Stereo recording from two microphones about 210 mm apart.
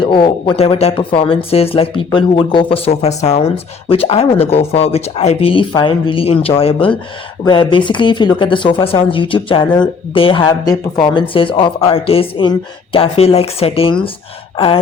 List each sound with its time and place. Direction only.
0.0 s speech: 20° left (ahead or behind)
14.5 s sigh: 25° left (ahead or behind)